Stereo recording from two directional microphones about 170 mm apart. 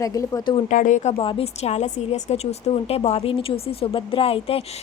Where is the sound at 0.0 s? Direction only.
20° left (ahead or behind).